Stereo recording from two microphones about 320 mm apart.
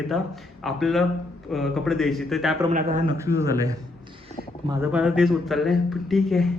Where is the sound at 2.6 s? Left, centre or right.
Right.